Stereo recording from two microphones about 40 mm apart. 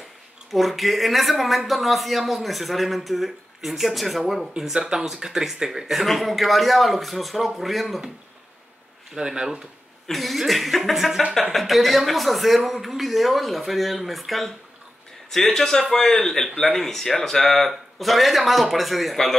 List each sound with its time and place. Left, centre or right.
0.5 s speech: centre
4.6 s speech: centre
9.1 s speech: centre
10.0 s speech: centre